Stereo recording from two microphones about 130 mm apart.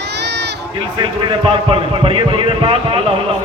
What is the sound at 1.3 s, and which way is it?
A man's voice, 45° right (ahead or behind).